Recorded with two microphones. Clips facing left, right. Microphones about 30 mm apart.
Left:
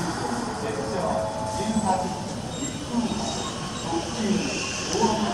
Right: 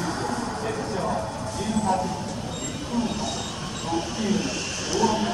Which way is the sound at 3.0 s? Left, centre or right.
Centre.